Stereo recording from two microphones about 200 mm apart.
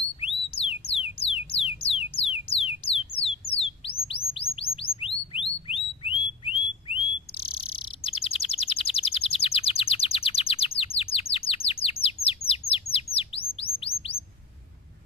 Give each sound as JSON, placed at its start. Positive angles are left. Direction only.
{"t": 0.2, "sound": "music", "side_deg": 30}
{"t": 2.4, "sound": "a sound", "side_deg": 30}
{"t": 4.1, "sound": "chirp", "side_deg": 30}
{"t": 4.7, "sound": "bird", "side_deg": 30}
{"t": 12.9, "sound": "chirp", "side_deg": 30}